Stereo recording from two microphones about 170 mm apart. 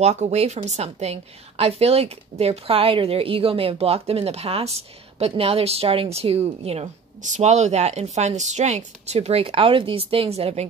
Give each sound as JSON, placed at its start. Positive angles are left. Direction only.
{"t": 0.0, "sound": "a woman's voice", "side_deg": -40}